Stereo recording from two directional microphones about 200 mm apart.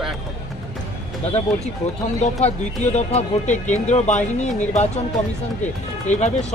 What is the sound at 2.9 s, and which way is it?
Speech, 35° left (ahead or behind).